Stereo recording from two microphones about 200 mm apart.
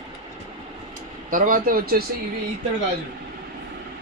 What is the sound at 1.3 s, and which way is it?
Speech, 40° right (ahead or behind).